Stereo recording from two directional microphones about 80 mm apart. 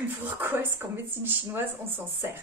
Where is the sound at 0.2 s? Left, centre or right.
Right.